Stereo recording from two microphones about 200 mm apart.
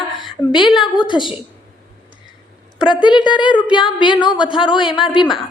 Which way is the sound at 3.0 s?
20° left (ahead or behind).